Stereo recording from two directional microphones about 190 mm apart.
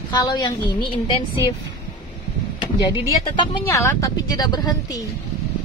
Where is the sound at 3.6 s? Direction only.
15° left (ahead or behind).